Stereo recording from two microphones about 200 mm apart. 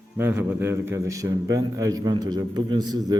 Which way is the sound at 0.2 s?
10° right (ahead or behind).